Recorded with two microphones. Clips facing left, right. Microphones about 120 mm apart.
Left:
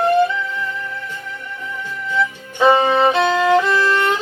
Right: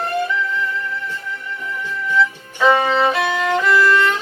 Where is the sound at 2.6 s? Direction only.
25° left (ahead or behind).